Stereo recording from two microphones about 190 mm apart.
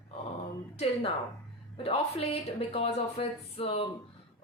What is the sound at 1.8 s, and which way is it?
Speech, 30° left (ahead or behind).